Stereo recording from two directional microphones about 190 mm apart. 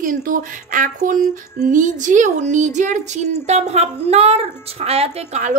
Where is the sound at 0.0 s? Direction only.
45° right (ahead or behind).